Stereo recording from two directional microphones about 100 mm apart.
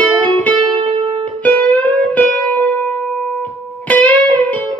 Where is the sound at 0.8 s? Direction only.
70° right (ahead or behind).